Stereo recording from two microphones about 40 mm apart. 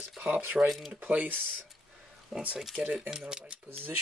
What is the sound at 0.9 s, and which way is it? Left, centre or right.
Speech, right.